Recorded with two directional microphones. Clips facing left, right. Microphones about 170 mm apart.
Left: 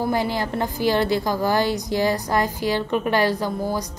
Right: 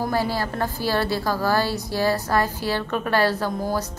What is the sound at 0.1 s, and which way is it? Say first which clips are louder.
A woman's voice: left 1 dB; 20° left (ahead or behind).